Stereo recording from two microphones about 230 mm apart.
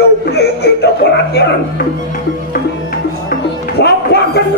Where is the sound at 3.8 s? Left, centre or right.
Left.